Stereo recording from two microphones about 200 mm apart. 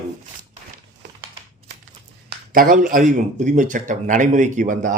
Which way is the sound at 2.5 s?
45° right (ahead or behind).